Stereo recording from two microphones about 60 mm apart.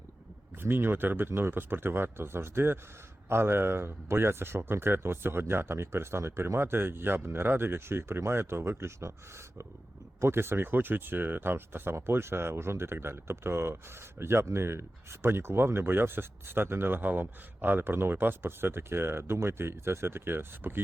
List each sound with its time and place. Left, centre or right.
0.6 s speech: right
10.2 s speech: right